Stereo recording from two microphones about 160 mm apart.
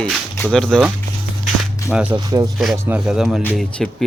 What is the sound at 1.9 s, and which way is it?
Speech, 5° right (ahead or behind).